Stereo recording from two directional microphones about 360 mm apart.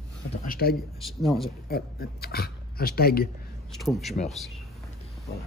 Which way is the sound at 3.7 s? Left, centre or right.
Centre.